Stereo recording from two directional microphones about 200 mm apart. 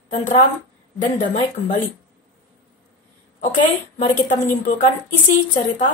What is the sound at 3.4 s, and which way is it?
A woman's voice, 40° left (ahead or behind).